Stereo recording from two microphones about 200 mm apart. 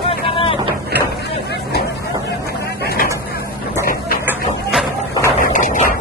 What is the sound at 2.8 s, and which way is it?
Vehicle, 50° left (ahead or behind).